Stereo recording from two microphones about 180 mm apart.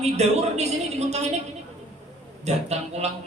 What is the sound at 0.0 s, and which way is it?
A man's voice, 35° right (ahead or behind).